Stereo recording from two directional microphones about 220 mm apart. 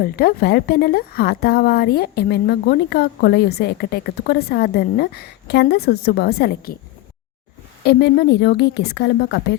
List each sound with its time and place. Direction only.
0.0 s speech: 45° left (ahead or behind)
7.9 s speech: 50° left (ahead or behind)